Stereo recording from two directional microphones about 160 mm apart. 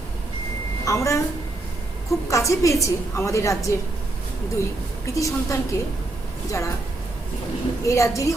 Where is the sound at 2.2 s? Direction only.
20° left (ahead or behind).